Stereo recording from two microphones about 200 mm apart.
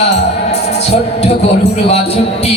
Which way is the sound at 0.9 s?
30° left (ahead or behind).